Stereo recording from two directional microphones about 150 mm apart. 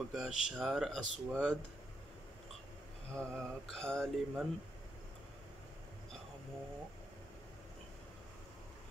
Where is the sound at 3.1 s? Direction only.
Centre (ahead or behind).